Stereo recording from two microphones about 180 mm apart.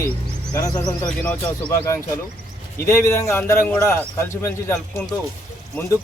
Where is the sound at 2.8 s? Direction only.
15° left (ahead or behind).